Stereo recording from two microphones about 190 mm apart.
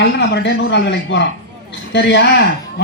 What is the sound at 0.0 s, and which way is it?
A man's voice, 65° left (ahead or behind).